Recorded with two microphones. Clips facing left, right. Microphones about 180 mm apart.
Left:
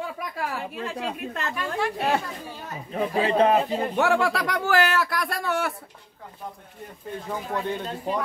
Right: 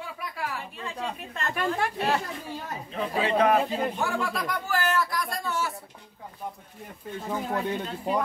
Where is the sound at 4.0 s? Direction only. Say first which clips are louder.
Left 7 dB; 80° left.